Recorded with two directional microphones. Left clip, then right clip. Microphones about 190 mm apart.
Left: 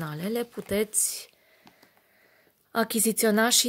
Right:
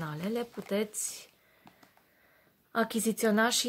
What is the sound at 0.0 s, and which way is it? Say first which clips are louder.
Speech: left 4 dB; 45° left (ahead or behind).